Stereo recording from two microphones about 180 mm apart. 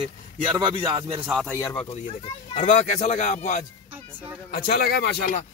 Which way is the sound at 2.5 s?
45° left (ahead or behind).